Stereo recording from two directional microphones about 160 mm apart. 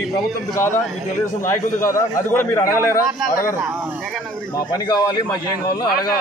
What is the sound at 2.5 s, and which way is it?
Speech, 20° left (ahead or behind).